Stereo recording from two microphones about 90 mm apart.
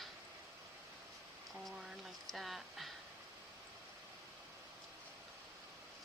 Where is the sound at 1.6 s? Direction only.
Centre (ahead or behind).